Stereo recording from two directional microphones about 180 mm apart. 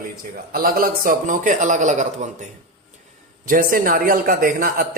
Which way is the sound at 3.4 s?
50° right (ahead or behind).